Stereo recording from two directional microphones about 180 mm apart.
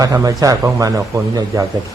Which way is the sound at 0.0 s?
20° right (ahead or behind).